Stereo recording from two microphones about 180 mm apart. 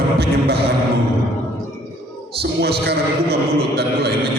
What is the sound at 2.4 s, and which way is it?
A man's voice, 65° right (ahead or behind).